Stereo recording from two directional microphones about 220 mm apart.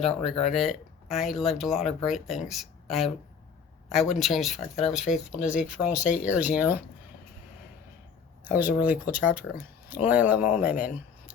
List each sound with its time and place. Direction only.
0.5 s speech: centre (ahead or behind)
8.4 s speech: 5° right (ahead or behind)